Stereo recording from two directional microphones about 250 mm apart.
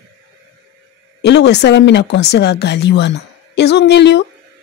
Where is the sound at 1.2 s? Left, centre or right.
Left.